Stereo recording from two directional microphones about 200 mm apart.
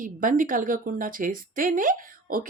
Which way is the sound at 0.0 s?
40° right (ahead or behind).